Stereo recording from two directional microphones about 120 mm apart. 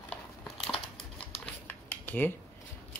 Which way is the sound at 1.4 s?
15° left (ahead or behind).